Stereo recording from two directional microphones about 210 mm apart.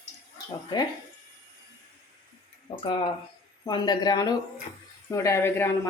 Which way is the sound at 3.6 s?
20° left (ahead or behind).